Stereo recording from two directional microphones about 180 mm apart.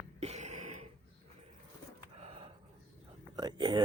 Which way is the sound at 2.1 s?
35° right (ahead or behind).